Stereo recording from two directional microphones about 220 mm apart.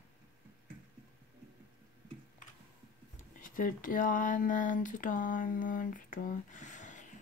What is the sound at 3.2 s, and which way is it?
Speech, 35° left (ahead or behind).